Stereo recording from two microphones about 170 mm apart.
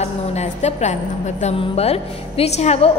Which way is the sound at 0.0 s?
40° left (ahead or behind).